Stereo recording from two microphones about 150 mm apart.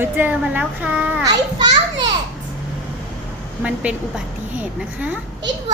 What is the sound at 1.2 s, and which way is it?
Speech, 25° right (ahead or behind).